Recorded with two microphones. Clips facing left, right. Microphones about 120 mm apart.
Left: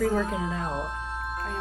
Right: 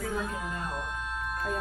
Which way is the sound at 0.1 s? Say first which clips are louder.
Left 6 dB; 35° left (ahead or behind).